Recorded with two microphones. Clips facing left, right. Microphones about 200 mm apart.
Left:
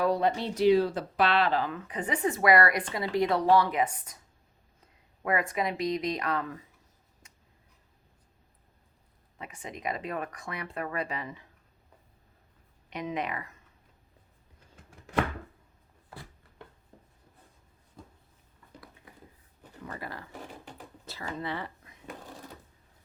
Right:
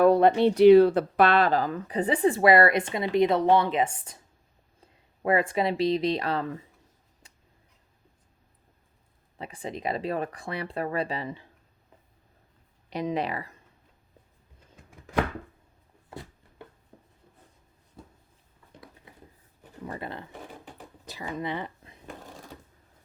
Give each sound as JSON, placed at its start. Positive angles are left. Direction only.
{"t": 0.0, "sound": "speech", "side_deg": -55}
{"t": 9.4, "sound": "speech", "side_deg": -30}
{"t": 12.9, "sound": "speech", "side_deg": -35}
{"t": 18.0, "sound": "cupboard open or close", "side_deg": -5}
{"t": 19.8, "sound": "speech", "side_deg": -25}
{"t": 21.0, "sound": "a sound", "side_deg": -15}